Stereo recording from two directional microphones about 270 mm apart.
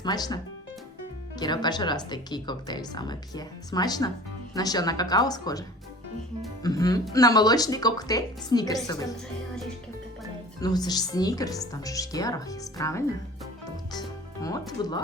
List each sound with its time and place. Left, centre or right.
0.0 s speech: centre
1.4 s speech: centre
10.6 s speech: centre
13.9 s music: centre
14.8 s speech: centre